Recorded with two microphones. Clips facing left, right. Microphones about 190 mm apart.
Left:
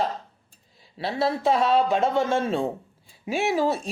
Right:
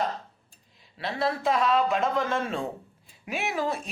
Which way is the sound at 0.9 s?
30° left (ahead or behind).